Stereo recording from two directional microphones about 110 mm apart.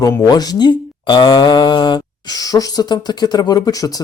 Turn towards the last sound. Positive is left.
turn(degrees=35)  # may be behind; listen again after turning